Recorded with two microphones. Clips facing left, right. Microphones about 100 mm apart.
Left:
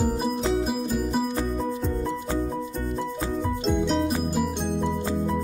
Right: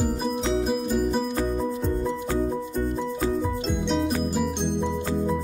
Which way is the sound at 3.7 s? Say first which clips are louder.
Left 3 dB; centre (ahead or behind).